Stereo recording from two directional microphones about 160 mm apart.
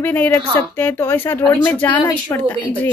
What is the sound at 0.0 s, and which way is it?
A woman's voice, 10° left (ahead or behind).